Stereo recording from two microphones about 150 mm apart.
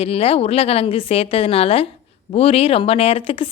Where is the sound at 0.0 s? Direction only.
40° left (ahead or behind).